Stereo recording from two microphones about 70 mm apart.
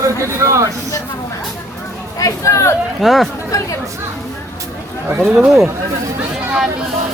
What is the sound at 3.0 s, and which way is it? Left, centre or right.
Speech, centre.